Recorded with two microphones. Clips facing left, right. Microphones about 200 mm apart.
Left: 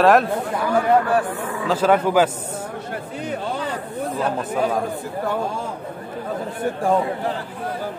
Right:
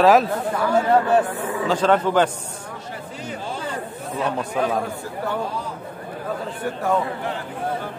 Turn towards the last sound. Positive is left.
turn(degrees=30)  # may be behind; listen again after turning